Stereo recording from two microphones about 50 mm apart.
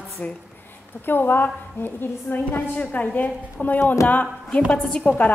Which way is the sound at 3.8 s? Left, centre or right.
Left.